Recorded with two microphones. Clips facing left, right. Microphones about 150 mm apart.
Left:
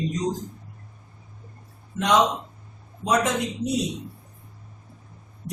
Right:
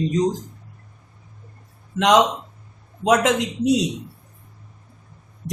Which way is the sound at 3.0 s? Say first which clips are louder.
Right 5 dB; 90° right.